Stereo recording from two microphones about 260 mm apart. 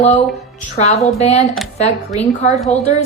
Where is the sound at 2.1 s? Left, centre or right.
Left.